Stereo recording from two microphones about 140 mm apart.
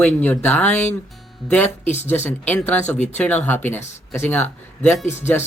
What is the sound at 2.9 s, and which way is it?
Speech, 55° left (ahead or behind).